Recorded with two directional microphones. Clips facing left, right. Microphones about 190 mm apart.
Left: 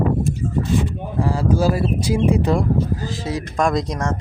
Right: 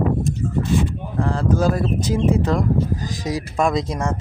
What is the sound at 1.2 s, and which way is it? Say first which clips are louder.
Speech: left 1 dB; 10° left (ahead or behind).